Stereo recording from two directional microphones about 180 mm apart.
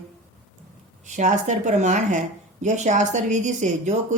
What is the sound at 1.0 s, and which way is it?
Speech, 40° right (ahead or behind).